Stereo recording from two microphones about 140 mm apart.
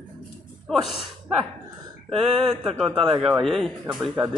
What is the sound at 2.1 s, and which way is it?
Speech, centre (ahead or behind).